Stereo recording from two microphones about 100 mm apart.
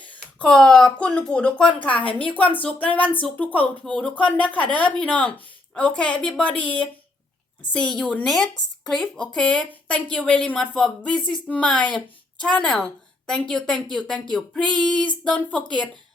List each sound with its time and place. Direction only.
0.3 s a woman's voice: 10° left (ahead or behind)